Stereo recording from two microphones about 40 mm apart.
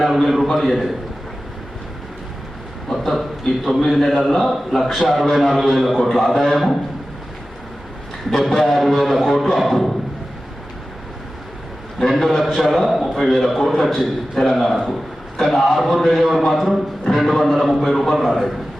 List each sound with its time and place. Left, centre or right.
0.0 s a man's voice: centre
2.9 s a man's voice: centre
8.4 s a man's voice: centre
11.9 s a man's voice: centre